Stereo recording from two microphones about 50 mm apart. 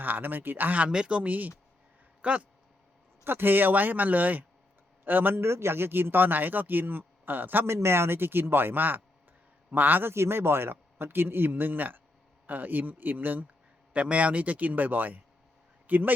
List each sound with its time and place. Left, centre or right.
0.0 s speech: right
0.9 s speech: centre
3.2 s speech: right
5.4 s speech: right
7.7 s speech: right
10.1 s speech: right
13.9 s speech: right